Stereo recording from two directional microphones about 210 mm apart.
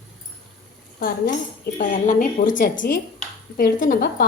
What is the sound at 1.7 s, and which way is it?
A woman's voice, 45° left (ahead or behind).